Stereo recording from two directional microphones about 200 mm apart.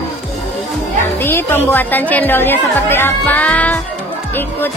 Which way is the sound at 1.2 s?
10° left (ahead or behind).